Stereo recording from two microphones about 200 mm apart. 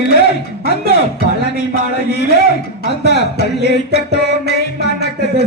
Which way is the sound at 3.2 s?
60° left (ahead or behind).